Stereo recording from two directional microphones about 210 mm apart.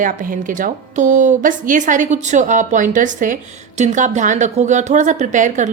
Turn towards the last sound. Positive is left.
turn(degrees=-35)  # may be behind; listen again after turning